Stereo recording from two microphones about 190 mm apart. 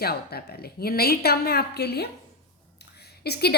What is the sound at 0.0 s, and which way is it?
A woman's voice, 55° left (ahead or behind).